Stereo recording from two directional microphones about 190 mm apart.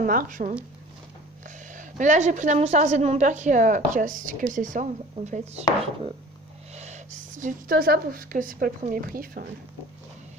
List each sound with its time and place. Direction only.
0.0 s speech: 45° right (ahead or behind)
1.7 s a woman's voice: 40° right (ahead or behind)
6.7 s speech: 35° right (ahead or behind)